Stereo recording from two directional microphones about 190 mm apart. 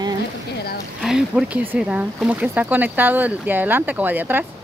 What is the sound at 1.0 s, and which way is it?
Speech, 5° right (ahead or behind).